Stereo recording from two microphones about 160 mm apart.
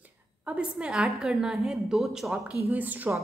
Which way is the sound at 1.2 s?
Centre (ahead or behind).